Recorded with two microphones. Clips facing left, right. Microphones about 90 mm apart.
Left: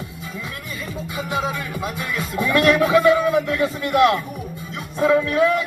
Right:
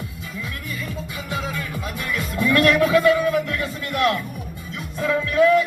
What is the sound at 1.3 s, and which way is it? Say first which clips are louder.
Music: left 3 dB; 20° left (ahead or behind).